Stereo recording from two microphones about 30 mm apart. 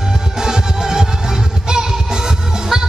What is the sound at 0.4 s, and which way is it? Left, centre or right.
Music, centre.